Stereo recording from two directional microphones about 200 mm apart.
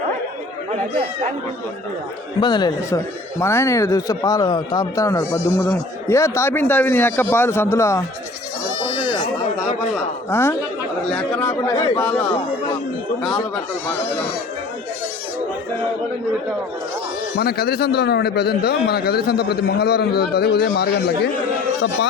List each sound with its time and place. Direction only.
2.4 s speech: 20° left (ahead or behind)
10.2 s speech: 10° left (ahead or behind)
17.3 s a man's voice: 50° left (ahead or behind)